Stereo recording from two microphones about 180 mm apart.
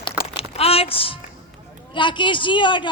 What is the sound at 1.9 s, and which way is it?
Speech, 25° left (ahead or behind).